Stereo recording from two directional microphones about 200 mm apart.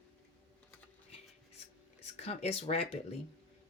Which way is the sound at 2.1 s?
30° left (ahead or behind).